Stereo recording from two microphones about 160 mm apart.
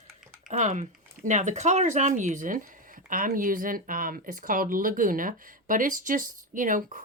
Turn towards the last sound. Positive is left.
turn(degrees=-55)  # may be behind; listen again after turning